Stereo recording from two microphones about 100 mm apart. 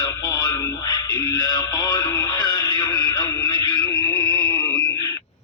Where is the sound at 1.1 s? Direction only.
35° left (ahead or behind).